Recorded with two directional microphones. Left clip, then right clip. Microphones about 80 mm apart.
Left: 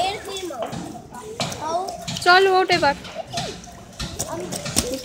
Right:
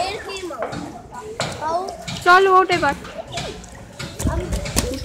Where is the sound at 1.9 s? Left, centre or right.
Centre.